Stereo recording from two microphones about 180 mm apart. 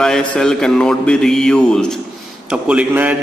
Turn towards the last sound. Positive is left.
turn(degrees=-10)  # may be behind; listen again after turning